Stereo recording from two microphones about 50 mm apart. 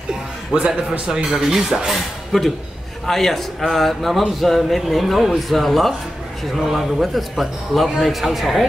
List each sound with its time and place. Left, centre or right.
0.5 s speech: right
1.1 s speech: centre
1.9 s speech: centre